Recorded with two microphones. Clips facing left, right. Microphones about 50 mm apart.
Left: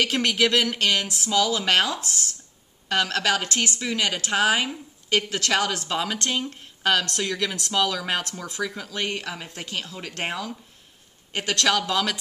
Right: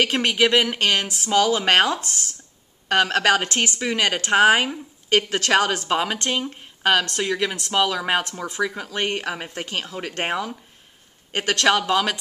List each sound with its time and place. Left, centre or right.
0.0 s speech: right
3.0 s a woman's voice: right
9.0 s a woman's voice: right
9.3 s speech: right
11.6 s speech: right